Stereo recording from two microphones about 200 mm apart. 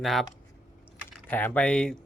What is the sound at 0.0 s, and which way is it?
Speech, centre (ahead or behind).